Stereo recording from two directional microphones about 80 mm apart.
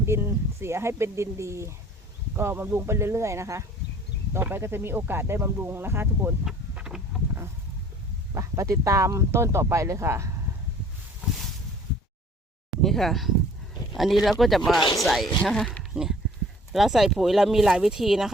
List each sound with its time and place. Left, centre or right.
0.0 s speech: right
6.7 s vehicle: centre
8.3 s speech: right
12.8 s speech: centre
15.8 s a sound: centre
16.7 s speech: centre